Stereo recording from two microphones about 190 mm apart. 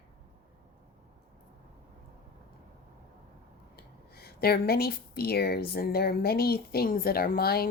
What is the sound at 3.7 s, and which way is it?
Speech, 55° left (ahead or behind).